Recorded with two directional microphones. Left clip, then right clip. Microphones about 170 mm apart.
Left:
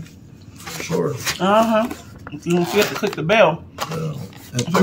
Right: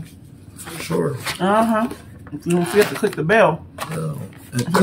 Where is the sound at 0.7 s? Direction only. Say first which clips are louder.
Left 2 dB; 25° left (ahead or behind).